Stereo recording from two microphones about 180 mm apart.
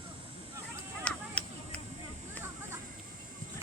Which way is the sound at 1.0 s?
5° left (ahead or behind).